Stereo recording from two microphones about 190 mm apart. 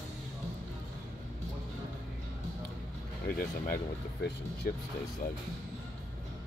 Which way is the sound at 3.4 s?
50° left (ahead or behind).